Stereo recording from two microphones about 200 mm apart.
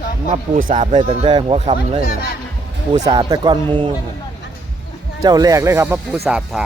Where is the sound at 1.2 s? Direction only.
25° right (ahead or behind).